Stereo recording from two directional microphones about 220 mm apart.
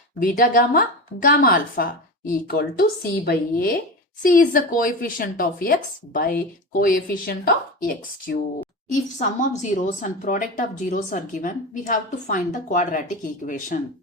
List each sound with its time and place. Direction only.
0.2 s speech: 40° left (ahead or behind)
8.9 s speech: 35° left (ahead or behind)